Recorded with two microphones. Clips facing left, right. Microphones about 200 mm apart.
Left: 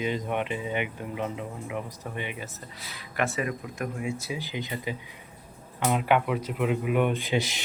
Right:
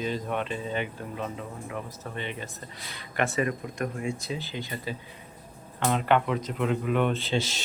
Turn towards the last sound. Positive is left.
turn(degrees=15)  # may be behind; listen again after turning